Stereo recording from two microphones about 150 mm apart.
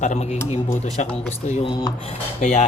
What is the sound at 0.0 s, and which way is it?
Speech, 50° left (ahead or behind).